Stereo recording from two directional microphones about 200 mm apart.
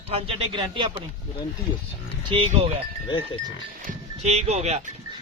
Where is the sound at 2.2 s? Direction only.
30° right (ahead or behind).